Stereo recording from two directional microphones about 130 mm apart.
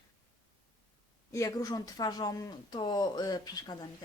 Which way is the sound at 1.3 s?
25° left (ahead or behind).